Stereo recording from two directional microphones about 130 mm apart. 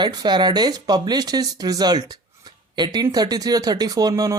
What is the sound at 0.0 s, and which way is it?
Speech, 35° right (ahead or behind).